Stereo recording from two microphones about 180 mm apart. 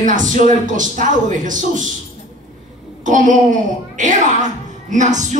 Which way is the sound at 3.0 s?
45° right (ahead or behind).